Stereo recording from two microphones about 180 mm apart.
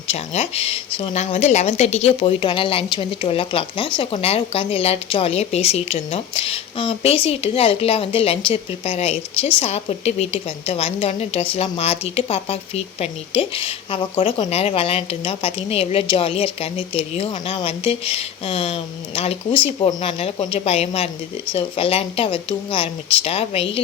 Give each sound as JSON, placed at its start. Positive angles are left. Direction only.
{"t": 0.1, "sound": "speech", "side_deg": 35}